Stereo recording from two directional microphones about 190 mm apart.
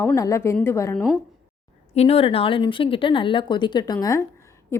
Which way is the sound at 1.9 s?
30° left (ahead or behind).